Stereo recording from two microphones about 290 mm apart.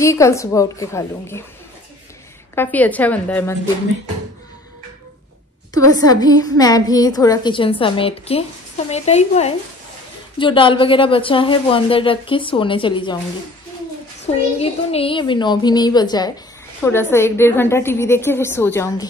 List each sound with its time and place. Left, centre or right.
0.0 s a woman's voice: centre
2.5 s a woman's voice: centre
5.9 s a woman's voice: centre
14.2 s a woman's voice: left